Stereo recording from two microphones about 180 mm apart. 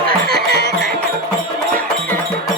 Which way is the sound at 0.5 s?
65° right (ahead or behind).